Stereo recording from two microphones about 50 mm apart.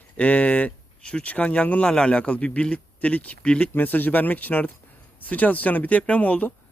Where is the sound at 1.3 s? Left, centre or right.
Left.